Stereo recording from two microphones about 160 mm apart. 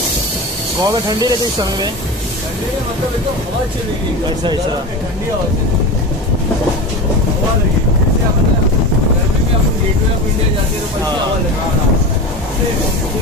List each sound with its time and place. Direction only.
0.8 s speech: 25° right (ahead or behind)